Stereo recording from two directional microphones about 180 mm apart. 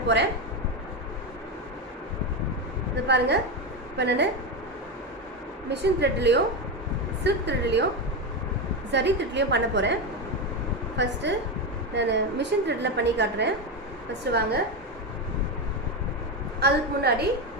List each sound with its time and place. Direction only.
2.9 s a woman's voice: 70° right (ahead or behind)
5.7 s a woman's voice: 70° right (ahead or behind)
8.9 s a woman's voice: 75° right (ahead or behind)
10.9 s a woman's voice: 75° right (ahead or behind)
16.6 s a woman's voice: 65° right (ahead or behind)